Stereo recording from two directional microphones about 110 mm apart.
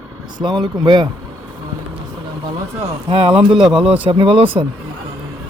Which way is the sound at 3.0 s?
55° right (ahead or behind).